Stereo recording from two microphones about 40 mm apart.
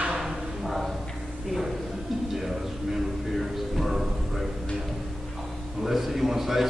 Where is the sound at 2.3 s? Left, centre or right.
Centre.